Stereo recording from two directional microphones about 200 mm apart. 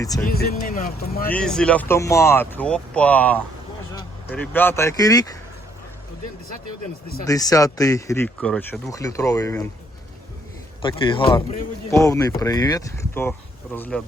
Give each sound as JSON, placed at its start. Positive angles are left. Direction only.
{"t": 0.3, "sound": "speech", "side_deg": 50}
{"t": 1.3, "sound": "speech", "side_deg": 5}
{"t": 7.3, "sound": "speech", "side_deg": 15}
{"t": 8.9, "sound": "speech", "side_deg": 15}
{"t": 10.8, "sound": "speech", "side_deg": 25}